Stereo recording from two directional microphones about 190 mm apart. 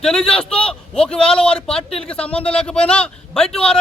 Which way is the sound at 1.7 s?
5° left (ahead or behind).